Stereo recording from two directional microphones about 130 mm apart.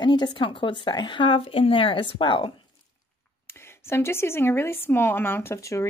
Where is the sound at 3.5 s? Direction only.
20° left (ahead or behind).